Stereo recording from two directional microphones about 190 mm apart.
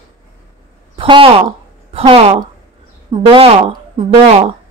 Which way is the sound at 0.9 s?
30° right (ahead or behind).